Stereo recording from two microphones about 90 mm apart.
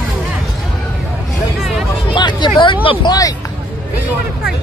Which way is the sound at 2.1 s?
55° left (ahead or behind).